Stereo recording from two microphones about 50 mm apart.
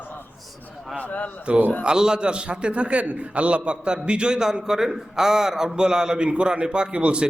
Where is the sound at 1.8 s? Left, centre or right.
Centre.